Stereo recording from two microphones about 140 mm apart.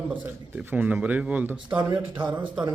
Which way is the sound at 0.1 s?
10° right (ahead or behind).